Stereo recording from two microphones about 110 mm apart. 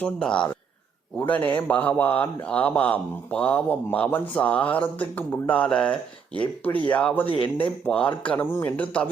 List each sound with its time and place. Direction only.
0.0 s a man's voice: 10° left (ahead or behind)